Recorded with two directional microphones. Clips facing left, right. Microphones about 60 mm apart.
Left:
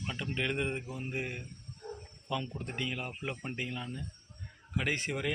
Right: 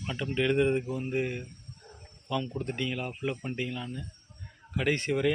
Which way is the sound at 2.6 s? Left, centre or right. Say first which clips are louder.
Right 5 dB; centre.